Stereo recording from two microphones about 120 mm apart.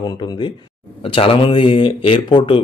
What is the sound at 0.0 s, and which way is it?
A man's voice, 40° left (ahead or behind).